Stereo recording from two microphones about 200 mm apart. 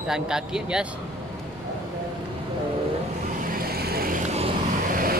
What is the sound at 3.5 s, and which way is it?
Vehicle, 50° right (ahead or behind).